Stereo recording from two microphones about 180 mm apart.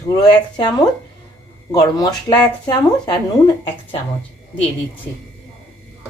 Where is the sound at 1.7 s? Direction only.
20° left (ahead or behind).